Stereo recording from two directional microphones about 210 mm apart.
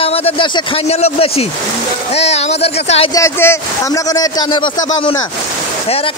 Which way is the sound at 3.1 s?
15° left (ahead or behind).